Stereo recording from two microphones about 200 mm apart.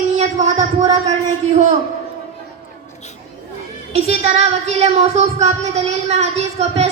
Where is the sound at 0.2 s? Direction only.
35° right (ahead or behind).